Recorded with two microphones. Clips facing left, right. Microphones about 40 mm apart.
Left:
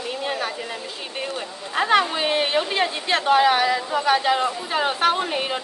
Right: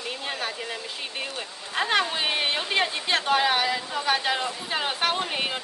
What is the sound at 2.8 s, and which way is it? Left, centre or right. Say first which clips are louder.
A woman's voice: left 4 dB; centre.